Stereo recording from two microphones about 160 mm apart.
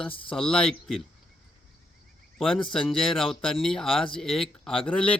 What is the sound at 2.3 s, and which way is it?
Speech, 5° left (ahead or behind).